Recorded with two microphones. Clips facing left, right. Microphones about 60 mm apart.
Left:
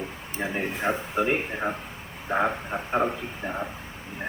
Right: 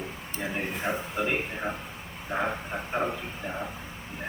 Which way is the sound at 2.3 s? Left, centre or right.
Left.